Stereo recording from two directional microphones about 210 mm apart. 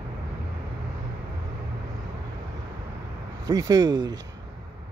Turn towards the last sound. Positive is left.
turn(degrees=-20)  # may be behind; listen again after turning